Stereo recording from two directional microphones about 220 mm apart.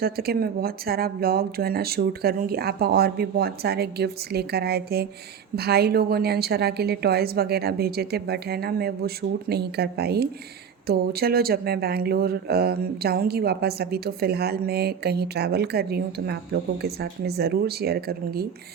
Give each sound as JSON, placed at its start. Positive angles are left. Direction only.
{"t": 0.0, "sound": "speech", "side_deg": -45}